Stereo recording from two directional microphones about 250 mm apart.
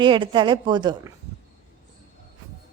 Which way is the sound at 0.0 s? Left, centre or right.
Centre.